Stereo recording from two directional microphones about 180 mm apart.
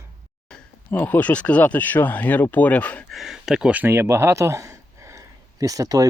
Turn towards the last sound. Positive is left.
turn(degrees=-20)  # may be behind; listen again after turning